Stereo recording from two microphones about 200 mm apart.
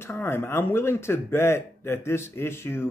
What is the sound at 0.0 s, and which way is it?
Speech, 10° left (ahead or behind).